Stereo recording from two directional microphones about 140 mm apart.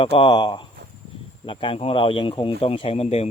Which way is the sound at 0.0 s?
40° left (ahead or behind).